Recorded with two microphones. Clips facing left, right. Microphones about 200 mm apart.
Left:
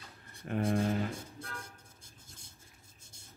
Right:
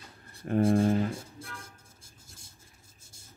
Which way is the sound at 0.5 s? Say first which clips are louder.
Right 7 dB; 30° right (ahead or behind).